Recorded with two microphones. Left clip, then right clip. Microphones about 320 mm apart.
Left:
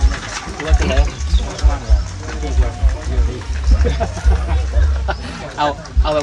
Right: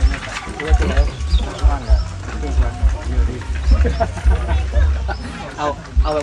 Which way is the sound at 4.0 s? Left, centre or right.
Centre.